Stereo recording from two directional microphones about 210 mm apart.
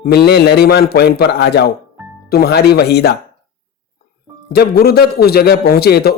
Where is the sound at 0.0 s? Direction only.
50° left (ahead or behind).